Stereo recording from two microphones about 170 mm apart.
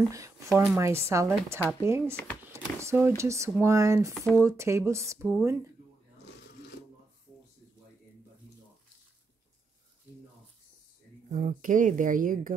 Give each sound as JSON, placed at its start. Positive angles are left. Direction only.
{"t": 0.1, "sound": "speech", "side_deg": -20}
{"t": 2.5, "sound": "a sound", "side_deg": -15}
{"t": 3.2, "sound": "speech", "side_deg": -15}
{"t": 11.4, "sound": "speech", "side_deg": -50}